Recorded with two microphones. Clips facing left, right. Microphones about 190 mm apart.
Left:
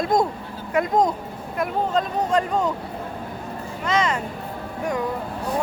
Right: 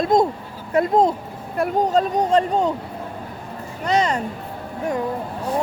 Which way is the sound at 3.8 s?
35° right (ahead or behind).